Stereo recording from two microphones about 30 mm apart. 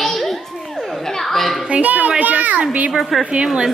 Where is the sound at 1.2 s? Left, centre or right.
Centre.